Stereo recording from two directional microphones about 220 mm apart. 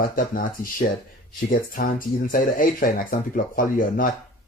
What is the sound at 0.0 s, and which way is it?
Speech, 40° left (ahead or behind).